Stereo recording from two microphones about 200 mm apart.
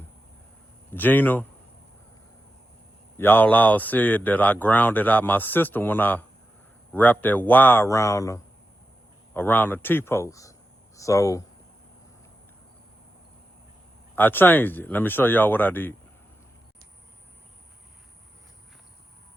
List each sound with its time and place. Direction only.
0.9 s speech: 10° left (ahead or behind)
3.2 s speech: 10° left (ahead or behind)
14.2 s speech: 10° left (ahead or behind)